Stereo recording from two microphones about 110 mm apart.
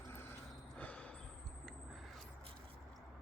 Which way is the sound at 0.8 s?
10° left (ahead or behind).